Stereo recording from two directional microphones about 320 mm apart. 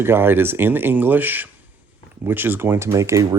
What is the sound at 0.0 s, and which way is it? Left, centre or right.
Speech, centre.